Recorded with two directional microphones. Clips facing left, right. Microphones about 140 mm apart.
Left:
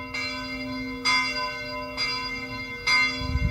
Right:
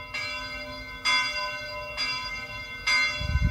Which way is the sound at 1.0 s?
35° left (ahead or behind).